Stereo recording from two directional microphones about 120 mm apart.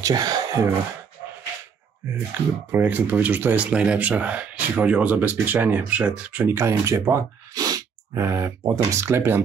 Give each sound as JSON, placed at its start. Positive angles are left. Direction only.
{"t": 0.0, "sound": "speech", "side_deg": -30}
{"t": 2.0, "sound": "speech", "side_deg": -20}
{"t": 6.5, "sound": "speech", "side_deg": -25}